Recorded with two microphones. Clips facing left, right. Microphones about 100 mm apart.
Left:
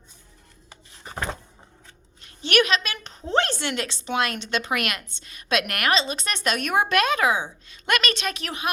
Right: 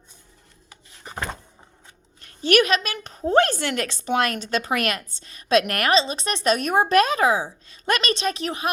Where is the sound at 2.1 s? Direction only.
45° right (ahead or behind).